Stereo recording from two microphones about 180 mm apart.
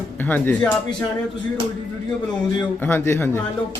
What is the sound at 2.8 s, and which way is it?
Speech, 15° left (ahead or behind).